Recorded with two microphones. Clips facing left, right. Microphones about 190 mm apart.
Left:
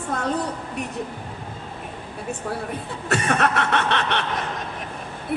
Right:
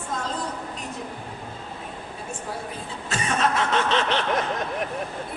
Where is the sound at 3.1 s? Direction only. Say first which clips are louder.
Left 3 dB; 65° left (ahead or behind).